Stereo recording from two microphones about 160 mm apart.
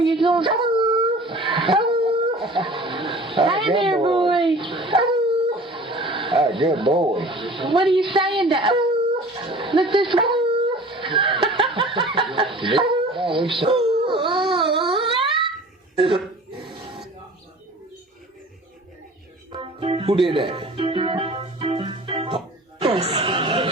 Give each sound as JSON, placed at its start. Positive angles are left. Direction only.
{"t": 0.0, "sound": "dog", "side_deg": -30}
{"t": 2.6, "sound": "a sound", "side_deg": -30}
{"t": 9.3, "sound": "dog", "side_deg": -30}
{"t": 11.5, "sound": "snicker", "side_deg": -30}
{"t": 12.3, "sound": "speech", "side_deg": -30}
{"t": 13.9, "sound": "a sound", "side_deg": -30}
{"t": 16.0, "sound": "speech", "side_deg": -35}
{"t": 19.5, "sound": "music", "side_deg": -35}
{"t": 23.0, "sound": "speech", "side_deg": -40}